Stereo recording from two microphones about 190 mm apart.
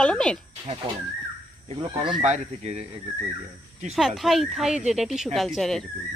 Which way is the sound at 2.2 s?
35° right (ahead or behind).